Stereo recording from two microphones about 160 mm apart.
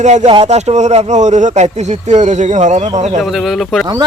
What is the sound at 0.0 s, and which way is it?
A man's voice, 45° right (ahead or behind).